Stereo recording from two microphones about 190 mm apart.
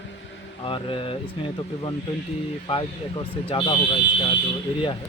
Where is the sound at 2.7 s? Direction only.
25° left (ahead or behind).